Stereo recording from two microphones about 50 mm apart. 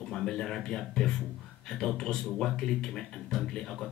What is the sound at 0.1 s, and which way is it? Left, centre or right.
Speech, centre.